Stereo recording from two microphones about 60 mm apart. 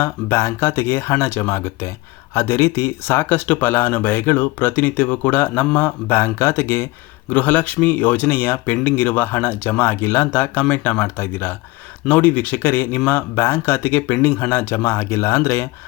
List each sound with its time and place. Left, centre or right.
0.0 s speech: left